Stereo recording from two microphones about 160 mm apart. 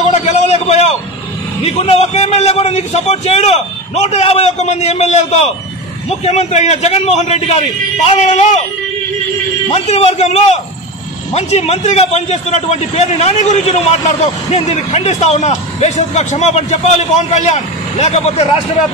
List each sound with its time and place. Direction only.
0.1 s a sound: 40° left (ahead or behind)
1.6 s a man's voice: 40° left (ahead or behind)
9.8 s a man's voice: 45° left (ahead or behind)